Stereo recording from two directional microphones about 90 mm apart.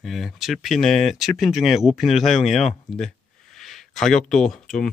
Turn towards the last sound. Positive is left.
turn(degrees=5)  # may be behind; listen again after turning